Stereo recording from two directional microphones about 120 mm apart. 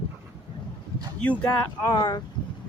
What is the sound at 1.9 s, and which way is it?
Speech, 35° left (ahead or behind).